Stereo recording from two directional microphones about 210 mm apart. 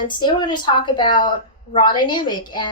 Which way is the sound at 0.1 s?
20° left (ahead or behind).